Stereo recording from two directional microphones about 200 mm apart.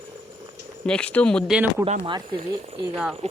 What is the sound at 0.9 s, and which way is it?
Speech, 5° left (ahead or behind).